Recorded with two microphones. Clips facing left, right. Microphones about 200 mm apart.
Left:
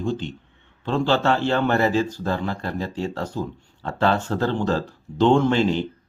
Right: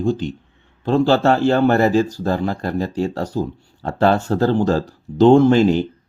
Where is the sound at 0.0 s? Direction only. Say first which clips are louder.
Right 6 dB; 40° right (ahead or behind).